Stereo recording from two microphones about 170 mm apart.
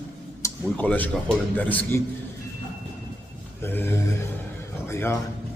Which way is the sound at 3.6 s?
10° left (ahead or behind).